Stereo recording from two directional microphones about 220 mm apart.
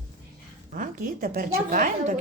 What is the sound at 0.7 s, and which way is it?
Speech, 40° right (ahead or behind).